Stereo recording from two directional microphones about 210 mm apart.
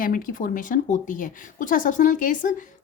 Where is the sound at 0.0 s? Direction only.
40° left (ahead or behind).